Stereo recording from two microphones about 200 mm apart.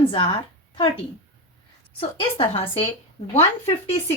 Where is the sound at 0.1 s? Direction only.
25° left (ahead or behind).